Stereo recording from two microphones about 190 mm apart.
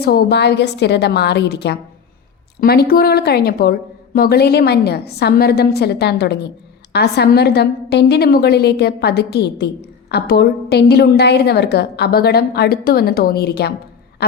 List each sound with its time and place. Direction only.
0.0 s a woman's voice: 55° left (ahead or behind)